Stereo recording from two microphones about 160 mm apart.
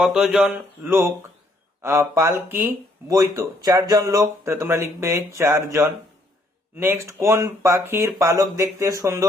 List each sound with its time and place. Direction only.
0.0 s a man's voice: 5° right (ahead or behind)
0.9 s speech: 15° right (ahead or behind)